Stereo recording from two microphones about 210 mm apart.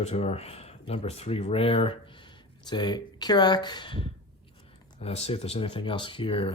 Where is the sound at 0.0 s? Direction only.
30° left (ahead or behind).